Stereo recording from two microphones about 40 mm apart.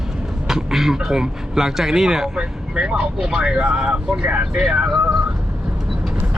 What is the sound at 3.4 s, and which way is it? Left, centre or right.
Speech, right.